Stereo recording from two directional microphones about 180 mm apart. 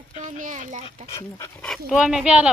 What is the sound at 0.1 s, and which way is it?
Speech, 40° right (ahead or behind).